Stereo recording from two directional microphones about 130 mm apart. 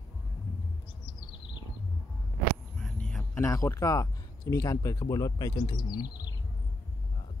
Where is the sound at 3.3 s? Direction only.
20° left (ahead or behind).